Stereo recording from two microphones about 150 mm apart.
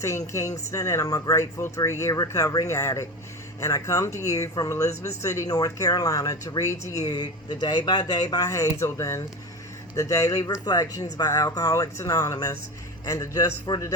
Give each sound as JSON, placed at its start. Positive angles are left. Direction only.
{"t": 0.3, "sound": "speech", "side_deg": 20}